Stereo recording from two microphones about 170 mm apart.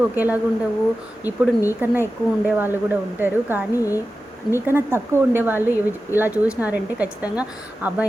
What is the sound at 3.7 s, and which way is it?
Speech, 20° left (ahead or behind).